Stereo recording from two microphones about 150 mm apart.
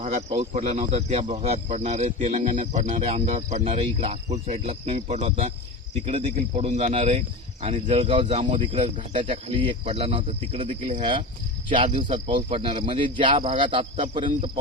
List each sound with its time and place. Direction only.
0.0 s speech: 45° right (ahead or behind)
2.9 s speech: 40° right (ahead or behind)